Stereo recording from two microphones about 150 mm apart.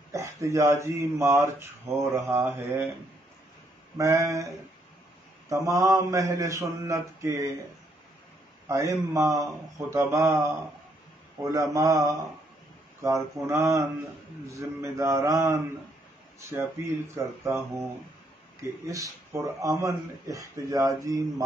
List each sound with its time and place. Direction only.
0.1 s a sound: 20° right (ahead or behind)
0.7 s a man's voice: 20° right (ahead or behind)
4.0 s a man's voice: 20° right (ahead or behind)
5.5 s a man's voice: 20° right (ahead or behind)
8.6 s a man's voice: 20° right (ahead or behind)
17.2 s a man's voice: 20° right (ahead or behind)
18.6 s a man's voice: 20° right (ahead or behind)